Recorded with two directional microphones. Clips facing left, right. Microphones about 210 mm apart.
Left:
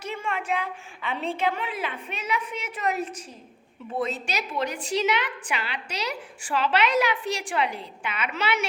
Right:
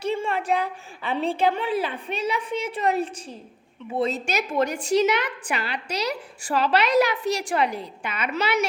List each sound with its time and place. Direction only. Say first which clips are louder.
0.0 s a woman's voice: right 6 dB; 30° right (ahead or behind)
4.3 s a woman's voice: right 5 dB; 50° right (ahead or behind)